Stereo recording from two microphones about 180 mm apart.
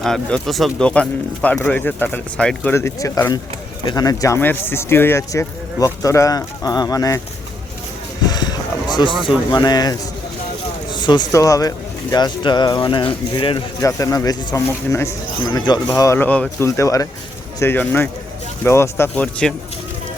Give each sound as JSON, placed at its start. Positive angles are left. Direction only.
{"t": 0.0, "sound": "speech", "side_deg": 5}
{"t": 8.2, "sound": "a sound", "side_deg": 20}
{"t": 9.5, "sound": "speech", "side_deg": 25}
{"t": 13.8, "sound": "speech", "side_deg": 20}